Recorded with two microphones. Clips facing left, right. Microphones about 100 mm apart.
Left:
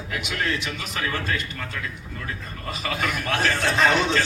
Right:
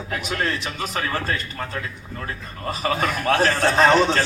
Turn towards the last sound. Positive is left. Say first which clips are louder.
# right 4 dB
turn(degrees=-35)  # may be behind; listen again after turning